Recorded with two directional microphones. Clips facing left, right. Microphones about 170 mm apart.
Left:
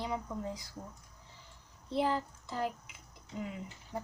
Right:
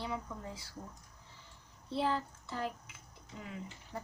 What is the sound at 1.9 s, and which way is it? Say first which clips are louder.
Speech: left 2 dB; 15° left (ahead or behind).